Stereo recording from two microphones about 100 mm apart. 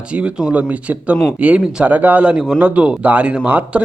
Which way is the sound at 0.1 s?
10° right (ahead or behind).